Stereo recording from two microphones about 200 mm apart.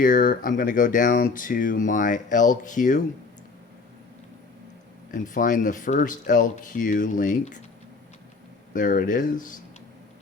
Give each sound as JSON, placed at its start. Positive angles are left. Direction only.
{"t": 0.0, "sound": "speech", "side_deg": 45}
{"t": 5.1, "sound": "speech", "side_deg": 40}
{"t": 8.7, "sound": "speech", "side_deg": 40}